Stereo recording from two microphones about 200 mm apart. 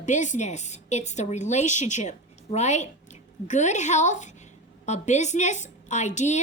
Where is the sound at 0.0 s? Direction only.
40° left (ahead or behind).